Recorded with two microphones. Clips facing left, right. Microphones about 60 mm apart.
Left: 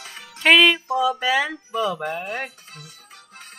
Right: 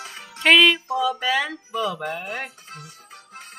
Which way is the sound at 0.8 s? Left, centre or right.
Centre.